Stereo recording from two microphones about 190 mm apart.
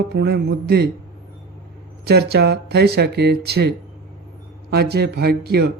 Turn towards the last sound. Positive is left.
turn(degrees=-60)  # may be behind; listen again after turning